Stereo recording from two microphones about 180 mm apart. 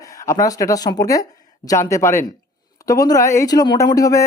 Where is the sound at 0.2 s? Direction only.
20° left (ahead or behind).